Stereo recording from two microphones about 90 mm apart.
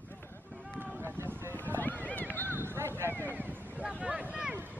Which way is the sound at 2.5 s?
30° right (ahead or behind).